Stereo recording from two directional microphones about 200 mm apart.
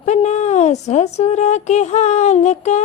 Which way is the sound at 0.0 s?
35° left (ahead or behind).